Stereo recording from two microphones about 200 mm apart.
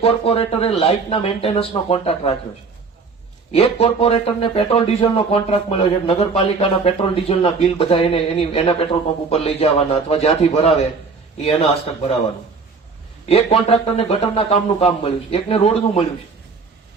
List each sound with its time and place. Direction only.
0.0 s speech: 30° left (ahead or behind)
3.5 s speech: 30° left (ahead or behind)
13.2 s speech: 30° left (ahead or behind)